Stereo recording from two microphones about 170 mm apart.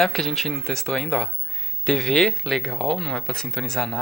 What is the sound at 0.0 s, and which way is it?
A man's voice, centre (ahead or behind).